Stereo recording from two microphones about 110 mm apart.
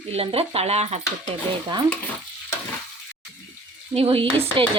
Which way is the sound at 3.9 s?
55° right (ahead or behind).